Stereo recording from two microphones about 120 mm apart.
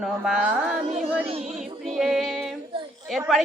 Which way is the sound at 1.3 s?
65° right (ahead or behind).